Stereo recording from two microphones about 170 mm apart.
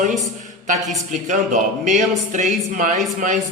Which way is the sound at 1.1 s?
45° right (ahead or behind).